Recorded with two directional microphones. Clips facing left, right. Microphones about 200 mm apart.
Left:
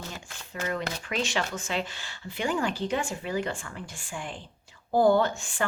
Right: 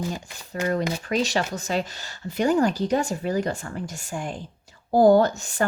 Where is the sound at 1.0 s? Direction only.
40° right (ahead or behind).